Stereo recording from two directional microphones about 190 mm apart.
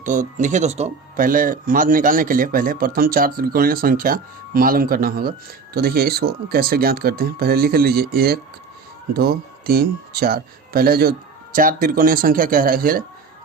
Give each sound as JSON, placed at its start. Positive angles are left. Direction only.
{"t": 0.0, "sound": "speech", "side_deg": -45}